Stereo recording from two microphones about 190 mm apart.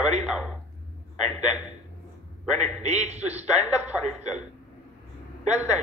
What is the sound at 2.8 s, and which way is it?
Speech, 35° right (ahead or behind).